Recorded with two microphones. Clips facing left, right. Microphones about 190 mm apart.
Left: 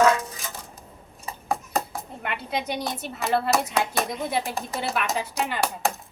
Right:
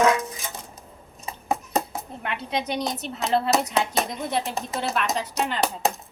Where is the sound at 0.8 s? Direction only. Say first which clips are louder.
Right 1 dB; 20° right (ahead or behind).